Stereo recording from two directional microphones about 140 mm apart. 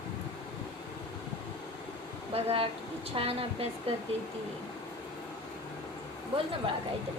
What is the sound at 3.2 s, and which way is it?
Speech, 45° right (ahead or behind).